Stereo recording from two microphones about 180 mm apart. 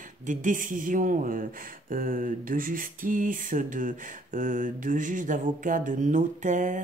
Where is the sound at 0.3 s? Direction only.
45° right (ahead or behind).